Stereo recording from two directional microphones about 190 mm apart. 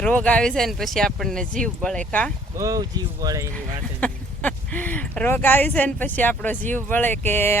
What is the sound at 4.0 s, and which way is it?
Speech, 5° left (ahead or behind).